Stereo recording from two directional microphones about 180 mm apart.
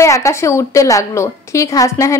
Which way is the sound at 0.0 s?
15° left (ahead or behind).